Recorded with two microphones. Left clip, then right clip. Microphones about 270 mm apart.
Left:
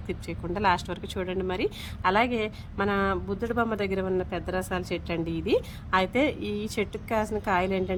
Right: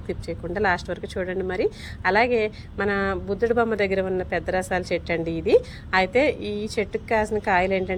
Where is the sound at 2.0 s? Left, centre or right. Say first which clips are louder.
Right 5 dB; left.